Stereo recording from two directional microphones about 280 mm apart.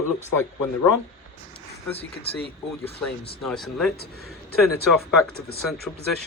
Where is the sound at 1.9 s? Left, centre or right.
Left.